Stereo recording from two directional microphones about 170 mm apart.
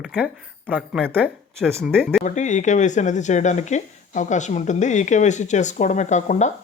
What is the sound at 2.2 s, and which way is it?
Speech, 45° left (ahead or behind).